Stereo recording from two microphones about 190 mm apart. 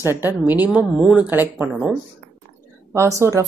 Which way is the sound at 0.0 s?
10° right (ahead or behind).